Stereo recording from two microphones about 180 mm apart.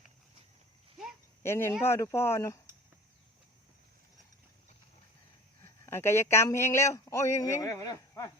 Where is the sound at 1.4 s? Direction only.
15° left (ahead or behind).